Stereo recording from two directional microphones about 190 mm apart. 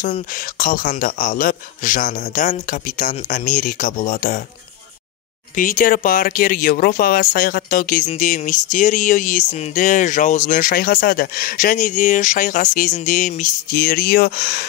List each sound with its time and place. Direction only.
0.0 s speech: 45° left (ahead or behind)
5.6 s speech: 45° left (ahead or behind)